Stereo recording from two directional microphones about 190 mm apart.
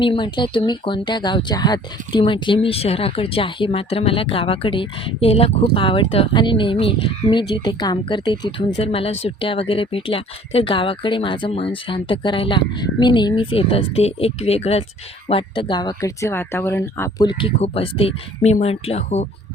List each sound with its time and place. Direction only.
0.0 s speech: 25° left (ahead or behind)